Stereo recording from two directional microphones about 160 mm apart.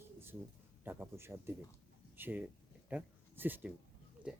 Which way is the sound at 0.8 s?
15° right (ahead or behind).